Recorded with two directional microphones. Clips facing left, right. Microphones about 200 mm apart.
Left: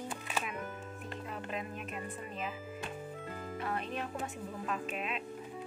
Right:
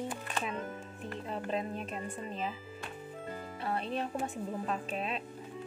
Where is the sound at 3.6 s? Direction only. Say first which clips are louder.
Right 4 dB; 30° right (ahead or behind).